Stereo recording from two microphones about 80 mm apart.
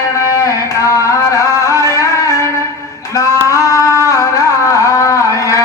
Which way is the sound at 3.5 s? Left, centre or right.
Left.